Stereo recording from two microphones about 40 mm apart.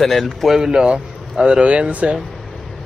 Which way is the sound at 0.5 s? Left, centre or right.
Centre.